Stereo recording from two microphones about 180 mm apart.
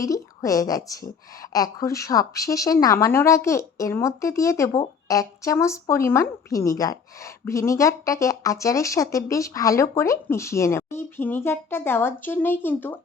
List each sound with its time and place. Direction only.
0.0 s speech: 20° left (ahead or behind)